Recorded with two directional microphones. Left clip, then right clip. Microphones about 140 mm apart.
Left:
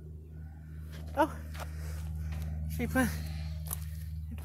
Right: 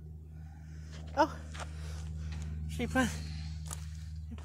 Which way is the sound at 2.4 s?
30° right (ahead or behind).